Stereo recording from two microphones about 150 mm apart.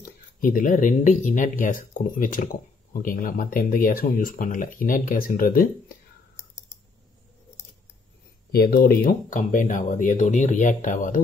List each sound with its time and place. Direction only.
0.4 s speech: 65° left (ahead or behind)
7.6 s scissors: 20° left (ahead or behind)
8.5 s speech: 90° left; by 11.1 s 60° left (ahead or behind)